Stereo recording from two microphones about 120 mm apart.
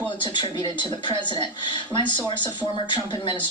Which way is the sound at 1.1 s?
40° left (ahead or behind).